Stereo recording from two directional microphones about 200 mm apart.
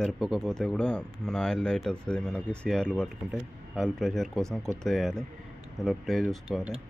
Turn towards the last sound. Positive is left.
turn(degrees=0)  # may be behind; listen again after turning